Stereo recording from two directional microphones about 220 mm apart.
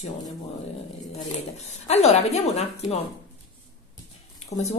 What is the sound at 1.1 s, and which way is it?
Speech, 30° left (ahead or behind).